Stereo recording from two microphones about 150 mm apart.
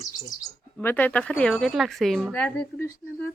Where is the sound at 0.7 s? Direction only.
10° left (ahead or behind).